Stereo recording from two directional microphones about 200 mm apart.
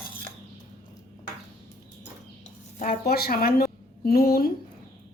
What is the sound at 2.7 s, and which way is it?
A woman's voice, 45° left (ahead or behind).